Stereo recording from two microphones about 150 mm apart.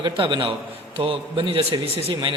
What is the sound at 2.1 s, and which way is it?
Speech, 30° right (ahead or behind).